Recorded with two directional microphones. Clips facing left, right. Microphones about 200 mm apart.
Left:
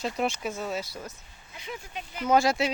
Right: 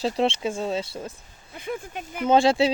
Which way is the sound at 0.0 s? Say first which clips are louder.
Right 6 dB; 30° right (ahead or behind).